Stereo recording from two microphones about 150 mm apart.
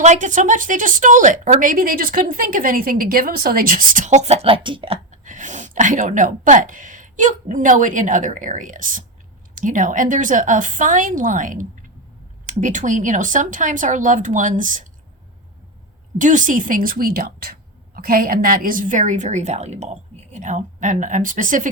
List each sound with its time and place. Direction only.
0.0 s a woman's voice: 55° right (ahead or behind); by 4.9 s 35° right (ahead or behind)
5.1 s a woman's voice: 55° right (ahead or behind)
16.1 s a woman's voice: 60° right (ahead or behind)